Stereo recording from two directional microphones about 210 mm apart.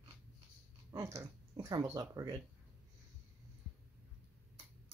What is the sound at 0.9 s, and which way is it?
Speech, 10° right (ahead or behind).